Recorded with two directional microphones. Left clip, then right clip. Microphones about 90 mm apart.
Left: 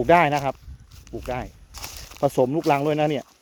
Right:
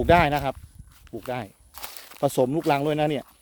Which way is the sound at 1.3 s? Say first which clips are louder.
Left 2 dB; 15° right (ahead or behind).